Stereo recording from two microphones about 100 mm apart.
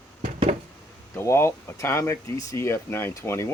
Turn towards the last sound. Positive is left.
turn(degrees=25)  # may be behind; listen again after turning